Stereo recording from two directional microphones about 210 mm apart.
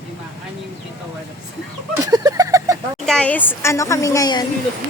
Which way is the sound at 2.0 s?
15° right (ahead or behind).